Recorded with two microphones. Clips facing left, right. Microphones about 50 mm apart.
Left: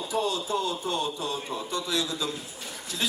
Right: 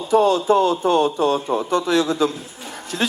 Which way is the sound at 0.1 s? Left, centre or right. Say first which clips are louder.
Right 13 dB; right.